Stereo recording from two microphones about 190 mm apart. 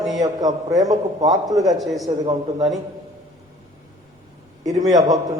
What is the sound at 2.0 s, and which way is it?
Speech, 20° right (ahead or behind).